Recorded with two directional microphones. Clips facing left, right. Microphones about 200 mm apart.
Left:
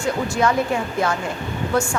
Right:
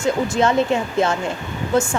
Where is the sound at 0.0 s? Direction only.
25° right (ahead or behind).